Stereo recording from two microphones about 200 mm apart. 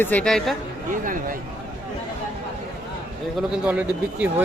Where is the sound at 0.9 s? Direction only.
45° right (ahead or behind).